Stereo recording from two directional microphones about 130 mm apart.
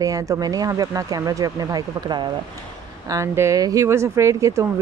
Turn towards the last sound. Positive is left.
turn(degrees=-25)  # may be behind; listen again after turning